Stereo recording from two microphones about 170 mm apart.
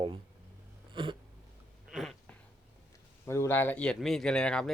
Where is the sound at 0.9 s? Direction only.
30° right (ahead or behind).